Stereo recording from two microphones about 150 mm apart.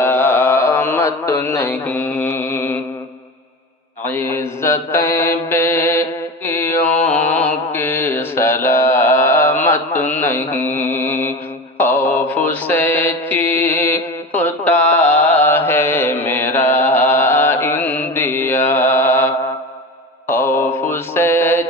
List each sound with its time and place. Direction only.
0.0 s mantra: 15° left (ahead or behind)
4.0 s mantra: 15° left (ahead or behind)